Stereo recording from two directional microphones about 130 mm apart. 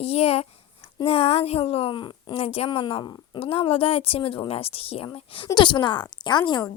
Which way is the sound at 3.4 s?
45° left (ahead or behind).